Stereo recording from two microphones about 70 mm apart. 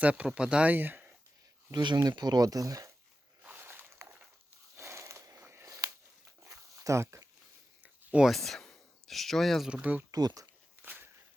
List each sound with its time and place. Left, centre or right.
0.0 s speech: centre
0.7 s speech: right
1.7 s speech: right
3.4 s a sound: right
5.6 s a sound: right
6.4 s dog: right
8.2 s speech: centre
9.6 s speech: centre
10.1 s speech: right
10.8 s a sound: right